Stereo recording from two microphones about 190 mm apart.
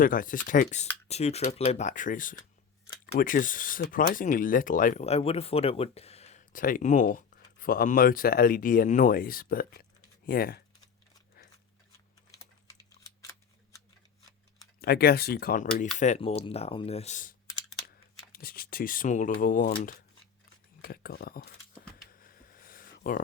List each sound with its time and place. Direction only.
0.0 s speech: 45° left (ahead or behind)
14.8 s speech: 55° left (ahead or behind)
16.0 s speech: 35° left (ahead or behind)
17.8 s speech: 50° left (ahead or behind)
22.2 s a sound: 50° left (ahead or behind)